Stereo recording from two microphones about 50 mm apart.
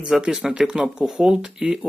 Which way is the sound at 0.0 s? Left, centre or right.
Centre.